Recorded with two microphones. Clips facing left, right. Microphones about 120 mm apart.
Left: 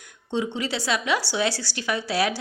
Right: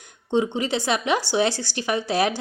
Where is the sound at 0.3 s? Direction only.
20° right (ahead or behind).